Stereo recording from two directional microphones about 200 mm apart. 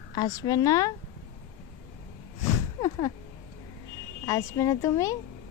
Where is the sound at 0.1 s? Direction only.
20° left (ahead or behind).